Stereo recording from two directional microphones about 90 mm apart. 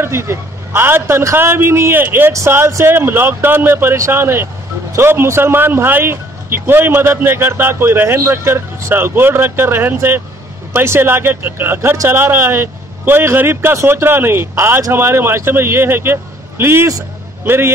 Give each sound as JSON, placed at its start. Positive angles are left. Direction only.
{"t": 0.0, "sound": "a man's voice", "side_deg": -30}